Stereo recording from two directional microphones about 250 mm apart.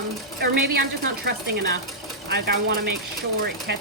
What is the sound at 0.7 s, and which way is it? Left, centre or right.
Speech, right.